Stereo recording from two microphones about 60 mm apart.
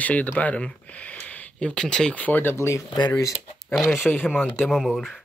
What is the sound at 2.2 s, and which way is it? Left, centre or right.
Speech, left.